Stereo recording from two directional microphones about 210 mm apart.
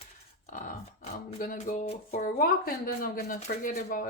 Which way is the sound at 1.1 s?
40° left (ahead or behind).